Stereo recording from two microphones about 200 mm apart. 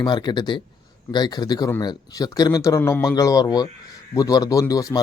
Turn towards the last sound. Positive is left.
turn(degrees=15)  # may be behind; listen again after turning